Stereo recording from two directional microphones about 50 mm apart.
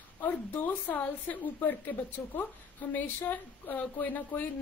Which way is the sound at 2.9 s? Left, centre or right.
Left.